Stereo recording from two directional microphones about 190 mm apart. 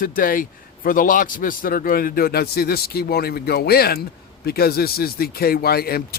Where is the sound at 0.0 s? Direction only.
50° left (ahead or behind).